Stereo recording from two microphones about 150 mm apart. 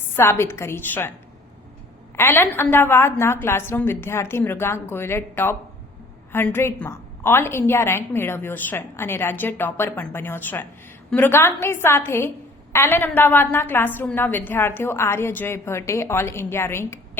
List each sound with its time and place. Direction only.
0.1 s a woman's voice: 15° left (ahead or behind)
2.1 s a woman's voice: 15° left (ahead or behind)